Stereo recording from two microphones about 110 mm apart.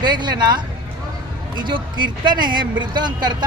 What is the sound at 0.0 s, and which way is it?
Speech, 45° right (ahead or behind).